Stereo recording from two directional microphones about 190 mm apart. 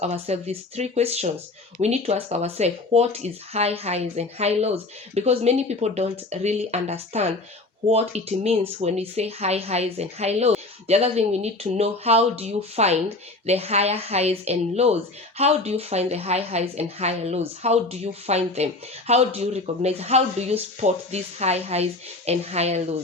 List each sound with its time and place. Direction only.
0.0 s a woman's voice: 35° right (ahead or behind)